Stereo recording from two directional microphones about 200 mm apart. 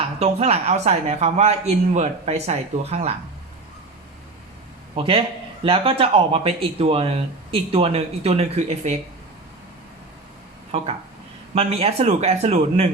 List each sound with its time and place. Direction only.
0.2 s speech: 30° right (ahead or behind)
4.9 s speech: 25° right (ahead or behind)
11.5 s speech: 30° right (ahead or behind)